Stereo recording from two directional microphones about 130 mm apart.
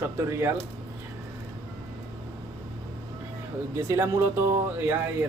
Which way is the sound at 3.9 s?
20° right (ahead or behind).